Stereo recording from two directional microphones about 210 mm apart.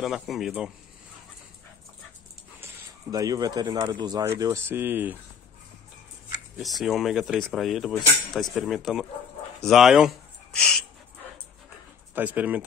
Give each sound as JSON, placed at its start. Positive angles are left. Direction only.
{"t": 0.0, "sound": "speech", "side_deg": 0}
{"t": 2.6, "sound": "speech", "side_deg": -15}
{"t": 6.6, "sound": "speech", "side_deg": 0}
{"t": 12.2, "sound": "speech", "side_deg": -5}